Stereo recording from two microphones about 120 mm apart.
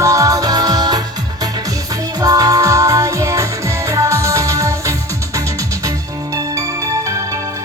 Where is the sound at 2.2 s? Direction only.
30° right (ahead or behind).